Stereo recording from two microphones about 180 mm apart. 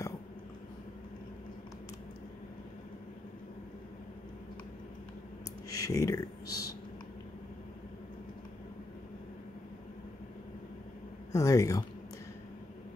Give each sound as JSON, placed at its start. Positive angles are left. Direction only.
{"t": 5.7, "sound": "speech", "side_deg": 20}
{"t": 11.3, "sound": "speech", "side_deg": 20}